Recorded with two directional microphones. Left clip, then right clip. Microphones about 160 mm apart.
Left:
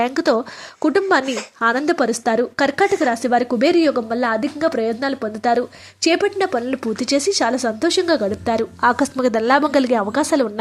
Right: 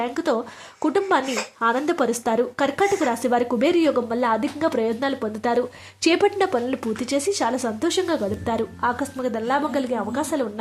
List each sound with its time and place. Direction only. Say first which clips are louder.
0.0 s speech: left 6 dB; 25° left (ahead or behind)